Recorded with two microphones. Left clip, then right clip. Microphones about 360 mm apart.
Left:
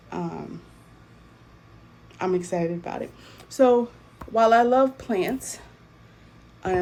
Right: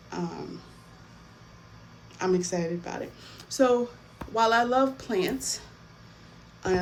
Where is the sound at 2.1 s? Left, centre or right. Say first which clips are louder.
Left 2 dB; centre.